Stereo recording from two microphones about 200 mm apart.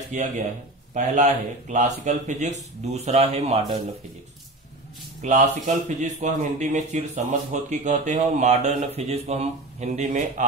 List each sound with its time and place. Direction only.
0.1 s speech: 40° right (ahead or behind)
5.2 s speech: 35° right (ahead or behind)